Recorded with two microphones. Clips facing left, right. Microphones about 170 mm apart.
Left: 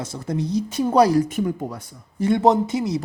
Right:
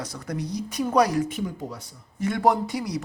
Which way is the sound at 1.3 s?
50° left (ahead or behind).